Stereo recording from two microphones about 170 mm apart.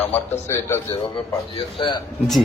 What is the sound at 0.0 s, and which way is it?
A man's voice, 15° left (ahead or behind).